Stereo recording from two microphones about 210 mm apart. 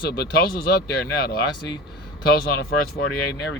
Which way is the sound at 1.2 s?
50° left (ahead or behind).